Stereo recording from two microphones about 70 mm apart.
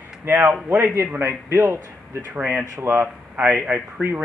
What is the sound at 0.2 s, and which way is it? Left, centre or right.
Speech, right.